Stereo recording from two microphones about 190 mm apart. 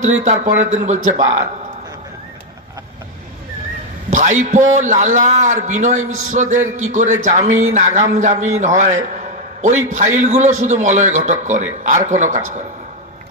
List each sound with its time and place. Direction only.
0.0 s a man's voice: 40° right (ahead or behind)
4.1 s a man's voice: 40° right (ahead or behind)